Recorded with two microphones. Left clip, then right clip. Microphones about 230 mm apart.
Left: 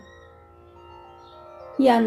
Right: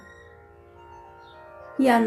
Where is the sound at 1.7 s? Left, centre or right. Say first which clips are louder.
Left 2 dB; centre.